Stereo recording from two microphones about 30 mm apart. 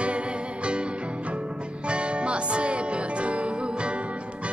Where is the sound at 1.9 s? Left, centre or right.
Right.